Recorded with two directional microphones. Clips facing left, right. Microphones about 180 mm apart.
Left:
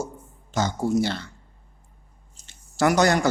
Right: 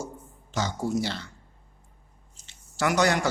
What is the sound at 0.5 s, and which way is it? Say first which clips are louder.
Speech: left 5 dB; 50° left (ahead or behind).